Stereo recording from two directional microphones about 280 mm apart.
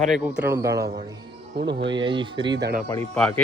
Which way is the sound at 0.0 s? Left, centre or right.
Centre.